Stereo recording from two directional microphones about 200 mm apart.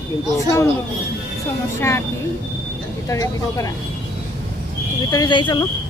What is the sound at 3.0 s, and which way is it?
Speech, 15° left (ahead or behind).